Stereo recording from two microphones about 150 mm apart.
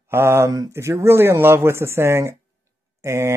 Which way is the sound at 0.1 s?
15° right (ahead or behind).